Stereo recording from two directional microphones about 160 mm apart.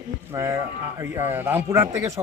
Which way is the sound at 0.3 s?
20° right (ahead or behind).